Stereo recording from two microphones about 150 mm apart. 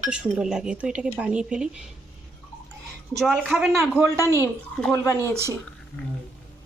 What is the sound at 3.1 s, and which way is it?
Speech, centre (ahead or behind).